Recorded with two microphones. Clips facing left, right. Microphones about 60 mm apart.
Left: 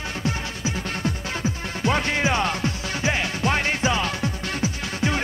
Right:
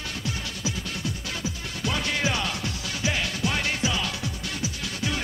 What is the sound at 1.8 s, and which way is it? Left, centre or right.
Music, left.